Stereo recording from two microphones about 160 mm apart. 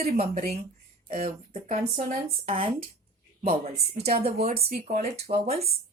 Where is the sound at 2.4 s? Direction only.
35° right (ahead or behind).